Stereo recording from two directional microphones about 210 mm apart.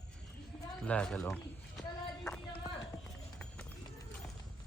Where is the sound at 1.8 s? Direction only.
5° left (ahead or behind).